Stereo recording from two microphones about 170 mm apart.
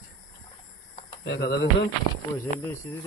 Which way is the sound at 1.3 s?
70° left (ahead or behind).